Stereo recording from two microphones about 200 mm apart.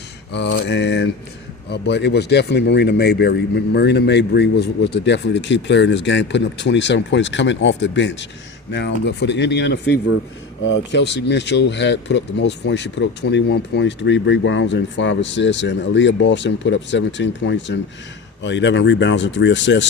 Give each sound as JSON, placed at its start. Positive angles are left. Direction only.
{"t": 0.3, "sound": "speech", "side_deg": 60}
{"t": 10.6, "sound": "speech", "side_deg": 70}